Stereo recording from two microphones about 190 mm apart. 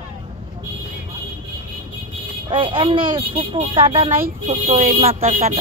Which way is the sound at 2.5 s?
25° right (ahead or behind).